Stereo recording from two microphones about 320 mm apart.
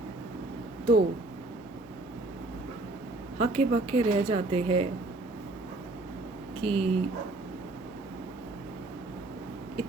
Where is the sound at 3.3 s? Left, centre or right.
Centre.